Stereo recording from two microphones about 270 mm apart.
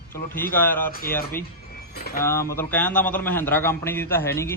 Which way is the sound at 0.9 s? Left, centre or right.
Left.